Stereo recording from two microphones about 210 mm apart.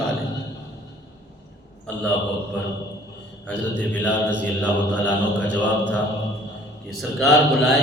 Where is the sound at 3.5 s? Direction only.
5° left (ahead or behind).